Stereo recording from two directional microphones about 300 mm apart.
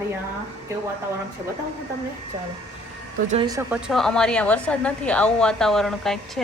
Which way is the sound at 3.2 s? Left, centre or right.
Right.